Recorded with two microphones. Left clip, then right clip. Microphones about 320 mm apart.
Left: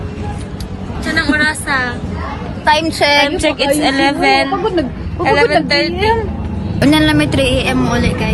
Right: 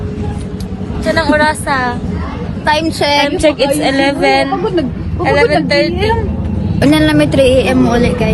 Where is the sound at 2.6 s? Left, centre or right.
Centre.